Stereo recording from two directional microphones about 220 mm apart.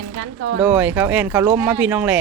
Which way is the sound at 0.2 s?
70° right (ahead or behind).